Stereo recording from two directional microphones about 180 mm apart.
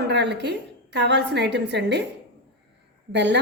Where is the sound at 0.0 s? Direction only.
70° right (ahead or behind).